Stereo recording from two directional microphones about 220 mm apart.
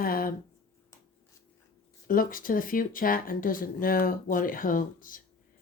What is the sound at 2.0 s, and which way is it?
Speech, 40° left (ahead or behind).